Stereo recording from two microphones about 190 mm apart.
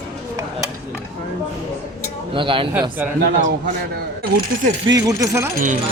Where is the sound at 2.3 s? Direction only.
25° right (ahead or behind).